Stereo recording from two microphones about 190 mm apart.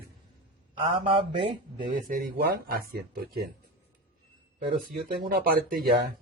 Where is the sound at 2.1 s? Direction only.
50° right (ahead or behind).